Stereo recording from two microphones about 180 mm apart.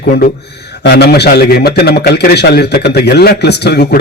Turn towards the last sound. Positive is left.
turn(degrees=65)  # may be behind; listen again after turning